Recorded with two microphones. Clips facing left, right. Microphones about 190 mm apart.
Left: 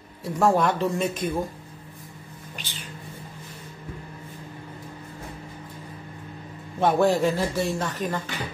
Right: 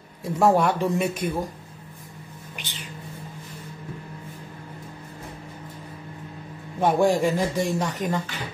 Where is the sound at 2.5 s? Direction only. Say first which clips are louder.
Right 1 dB; 15° right (ahead or behind).